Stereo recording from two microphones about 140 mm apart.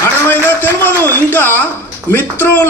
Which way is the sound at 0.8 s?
10° left (ahead or behind).